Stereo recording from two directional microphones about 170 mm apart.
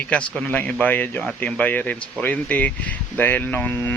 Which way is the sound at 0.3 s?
5° left (ahead or behind).